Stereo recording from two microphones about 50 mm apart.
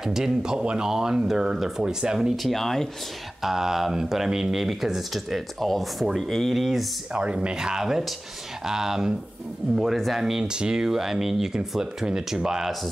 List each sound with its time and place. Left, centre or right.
0.0 s speech: centre
2.3 s speech: centre
3.4 s speech: centre
7.2 s speech: right